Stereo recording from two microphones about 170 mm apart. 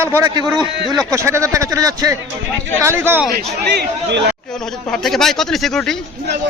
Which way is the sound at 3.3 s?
75° right (ahead or behind).